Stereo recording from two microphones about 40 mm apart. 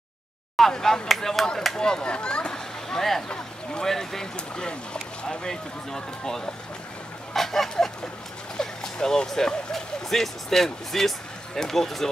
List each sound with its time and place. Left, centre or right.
0.6 s speech: centre
1.8 s speech: left
7.3 s a sound: centre
10.0 s speech: centre